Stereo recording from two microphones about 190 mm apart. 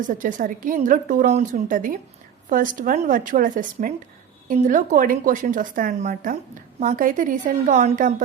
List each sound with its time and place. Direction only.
0.0 s a woman's voice: 45° right (ahead or behind)